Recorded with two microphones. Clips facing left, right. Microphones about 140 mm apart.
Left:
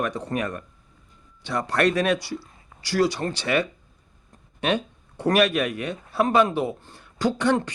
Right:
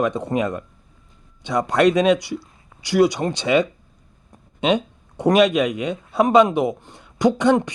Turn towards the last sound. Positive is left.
turn(degrees=-20)  # may be behind; listen again after turning